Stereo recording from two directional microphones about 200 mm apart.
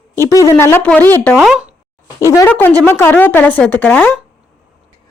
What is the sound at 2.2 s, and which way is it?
Speech, 15° left (ahead or behind).